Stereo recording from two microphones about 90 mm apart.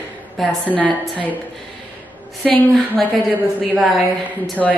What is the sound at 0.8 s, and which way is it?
Speech, 15° left (ahead or behind).